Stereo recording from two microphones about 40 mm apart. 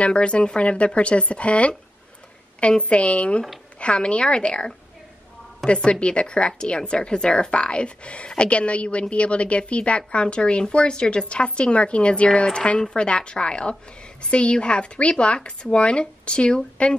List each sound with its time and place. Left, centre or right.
0.0 s speech: left
2.8 s a woman's voice: left
5.9 s speech: left